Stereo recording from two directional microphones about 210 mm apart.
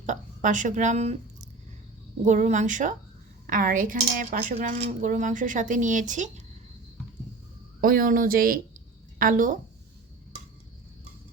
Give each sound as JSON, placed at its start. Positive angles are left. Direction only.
{"t": 0.0, "sound": "a sound", "side_deg": -35}
{"t": 2.2, "sound": "speech", "side_deg": -35}
{"t": 7.8, "sound": "a woman's voice", "side_deg": -45}